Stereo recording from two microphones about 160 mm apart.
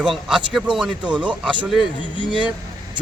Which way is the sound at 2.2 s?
30° right (ahead or behind).